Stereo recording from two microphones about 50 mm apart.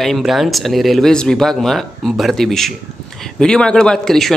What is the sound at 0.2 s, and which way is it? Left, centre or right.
Speech, centre.